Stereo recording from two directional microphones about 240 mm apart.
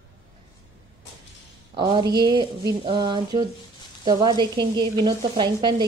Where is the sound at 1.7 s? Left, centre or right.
Centre.